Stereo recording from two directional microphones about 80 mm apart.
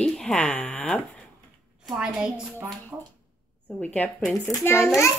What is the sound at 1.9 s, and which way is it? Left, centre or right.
Speech, centre.